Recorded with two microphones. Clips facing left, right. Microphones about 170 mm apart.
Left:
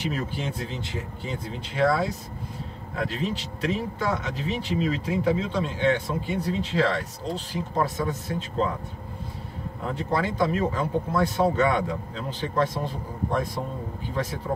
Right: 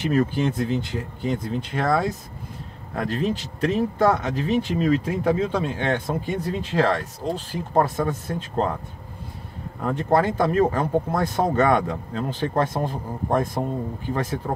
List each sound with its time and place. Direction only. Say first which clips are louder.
0.1 s speech: right 9 dB; 55° right (ahead or behind)
9.8 s speech: right 6 dB; 55° right (ahead or behind)